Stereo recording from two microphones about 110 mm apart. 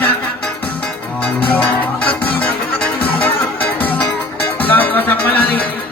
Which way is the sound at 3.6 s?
15° left (ahead or behind).